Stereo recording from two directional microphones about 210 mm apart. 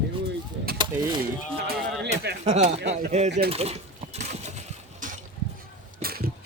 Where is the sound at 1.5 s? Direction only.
50° right (ahead or behind).